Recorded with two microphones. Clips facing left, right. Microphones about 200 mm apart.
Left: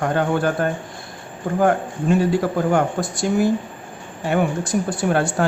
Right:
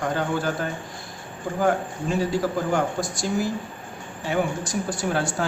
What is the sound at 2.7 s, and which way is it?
A man's voice, 60° left (ahead or behind).